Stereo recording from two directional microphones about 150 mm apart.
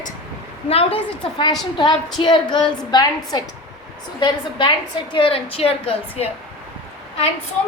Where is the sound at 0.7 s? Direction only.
40° left (ahead or behind).